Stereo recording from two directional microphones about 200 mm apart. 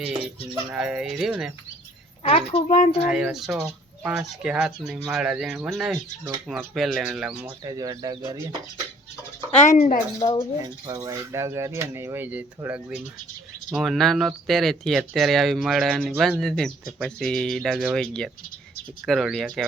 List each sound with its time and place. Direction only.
0.5 s speech: 5° right (ahead or behind)
2.2 s speech: 30° left (ahead or behind)
3.0 s speech: 5° right (ahead or behind)
7.6 s speech: 20° right (ahead or behind)
9.5 s speech: 35° left (ahead or behind)
10.6 s speech: 15° right (ahead or behind); by 19.6 s centre (ahead or behind)